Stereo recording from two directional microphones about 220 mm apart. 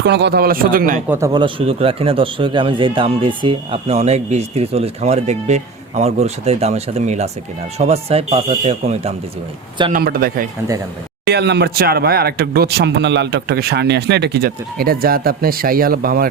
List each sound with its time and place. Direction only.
0.0 s speech: 50° right (ahead or behind)
1.0 s a man's voice: 10° right (ahead or behind); by 9.1 s 30° right (ahead or behind)
9.9 s speech: 40° right (ahead or behind)